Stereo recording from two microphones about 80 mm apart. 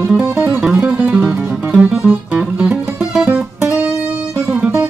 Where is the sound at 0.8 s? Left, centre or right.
Centre.